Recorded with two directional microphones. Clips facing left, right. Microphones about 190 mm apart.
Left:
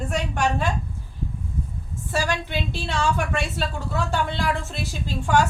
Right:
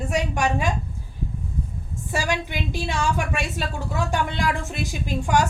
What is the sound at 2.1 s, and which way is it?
A woman's voice, 15° right (ahead or behind).